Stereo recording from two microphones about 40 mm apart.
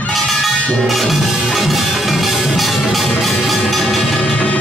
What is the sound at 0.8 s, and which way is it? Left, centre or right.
Music, centre.